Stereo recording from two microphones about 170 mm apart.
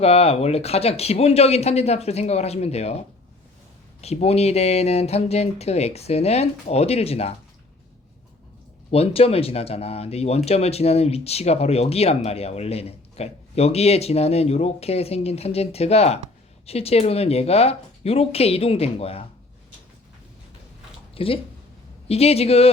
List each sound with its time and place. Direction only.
0.0 s speech: 35° left (ahead or behind)
4.0 s speech: 40° left (ahead or behind)
8.9 s speech: 35° left (ahead or behind)
21.2 s speech: 35° left (ahead or behind)